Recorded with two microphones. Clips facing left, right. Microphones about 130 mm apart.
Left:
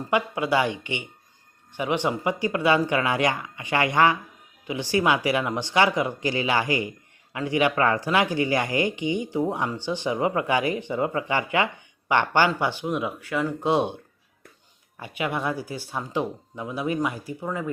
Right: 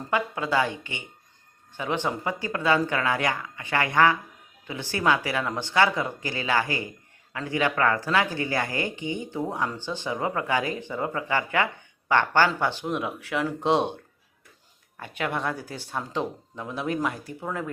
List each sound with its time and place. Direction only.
0.1 s speech: 15° left (ahead or behind)
12.8 s speech: centre (ahead or behind)
14.9 s speech: 10° left (ahead or behind)